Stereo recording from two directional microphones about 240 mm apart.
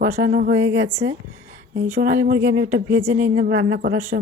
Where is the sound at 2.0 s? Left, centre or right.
Right.